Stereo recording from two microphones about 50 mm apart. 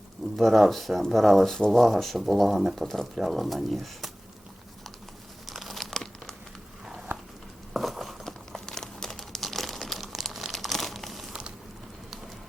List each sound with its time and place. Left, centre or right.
0.3 s speech: centre
1.5 s speech: centre
1.8 s speech: centre
5.5 s crumpling: centre
7.7 s a sound: centre
8.3 s crumpling: centre
11.3 s a sound: centre